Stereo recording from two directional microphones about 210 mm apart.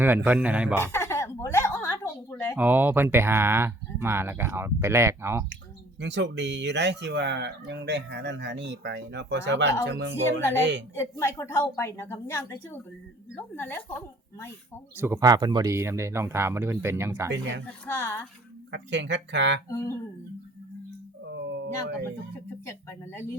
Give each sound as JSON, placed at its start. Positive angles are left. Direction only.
{"t": 0.3, "sound": "speech", "side_deg": -5}
{"t": 0.8, "sound": "a sound", "side_deg": 10}
{"t": 2.6, "sound": "speech", "side_deg": -10}
{"t": 6.0, "sound": "speech", "side_deg": -55}
{"t": 10.9, "sound": "a woman's voice", "side_deg": 10}
{"t": 14.9, "sound": "speech", "side_deg": -10}
{"t": 17.8, "sound": "a woman's voice", "side_deg": 10}
{"t": 18.7, "sound": "speech", "side_deg": -55}
{"t": 21.2, "sound": "a sound", "side_deg": -55}
{"t": 22.6, "sound": "a woman's voice", "side_deg": 10}